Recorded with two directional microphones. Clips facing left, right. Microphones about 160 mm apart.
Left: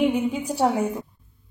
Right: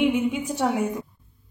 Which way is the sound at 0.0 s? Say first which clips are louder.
Even; 35° left (ahead or behind).